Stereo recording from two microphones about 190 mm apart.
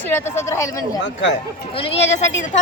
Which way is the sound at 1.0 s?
70° left (ahead or behind).